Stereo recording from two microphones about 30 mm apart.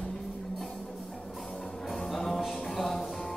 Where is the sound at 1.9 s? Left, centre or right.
Centre.